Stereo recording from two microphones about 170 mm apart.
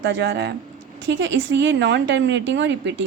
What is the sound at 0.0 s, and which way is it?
A woman's voice, 90° right.